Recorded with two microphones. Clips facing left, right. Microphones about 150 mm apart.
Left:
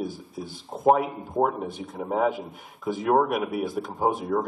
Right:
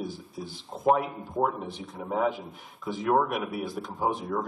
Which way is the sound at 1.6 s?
50° left (ahead or behind).